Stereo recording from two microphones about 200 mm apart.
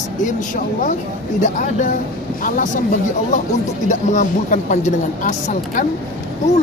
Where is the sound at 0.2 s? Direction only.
40° left (ahead or behind).